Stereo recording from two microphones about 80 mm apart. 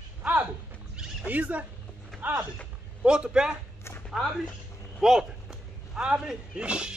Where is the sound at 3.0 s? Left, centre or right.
Centre.